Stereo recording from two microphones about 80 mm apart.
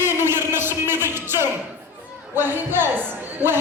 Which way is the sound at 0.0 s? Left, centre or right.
Right.